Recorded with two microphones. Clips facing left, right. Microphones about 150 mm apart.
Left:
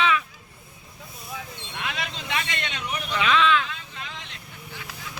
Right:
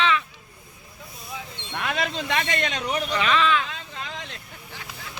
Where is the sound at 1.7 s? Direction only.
50° right (ahead or behind).